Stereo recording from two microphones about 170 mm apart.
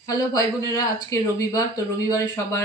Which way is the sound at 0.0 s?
20° left (ahead or behind).